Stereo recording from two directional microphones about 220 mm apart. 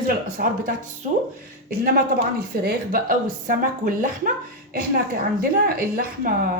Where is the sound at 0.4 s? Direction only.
45° right (ahead or behind).